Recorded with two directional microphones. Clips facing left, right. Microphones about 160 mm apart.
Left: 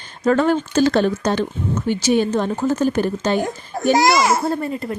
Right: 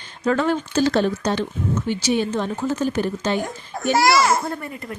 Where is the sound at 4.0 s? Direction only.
20° left (ahead or behind).